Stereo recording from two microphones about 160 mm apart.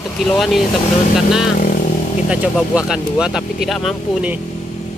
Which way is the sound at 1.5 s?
55° left (ahead or behind).